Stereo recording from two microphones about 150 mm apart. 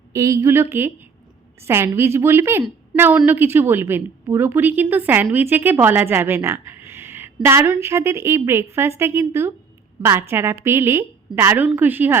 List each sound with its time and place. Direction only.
0.1 s a woman's voice: 20° right (ahead or behind)